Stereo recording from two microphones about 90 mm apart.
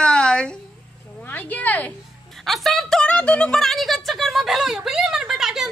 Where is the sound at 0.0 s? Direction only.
10° left (ahead or behind).